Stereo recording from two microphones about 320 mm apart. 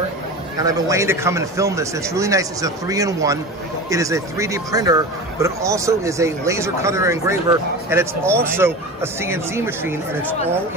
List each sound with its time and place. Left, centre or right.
0.6 s speech: centre